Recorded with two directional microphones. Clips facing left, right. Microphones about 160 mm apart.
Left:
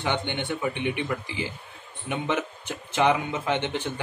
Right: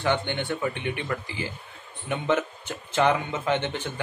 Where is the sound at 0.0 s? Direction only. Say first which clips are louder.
Right 2 dB; 15° left (ahead or behind).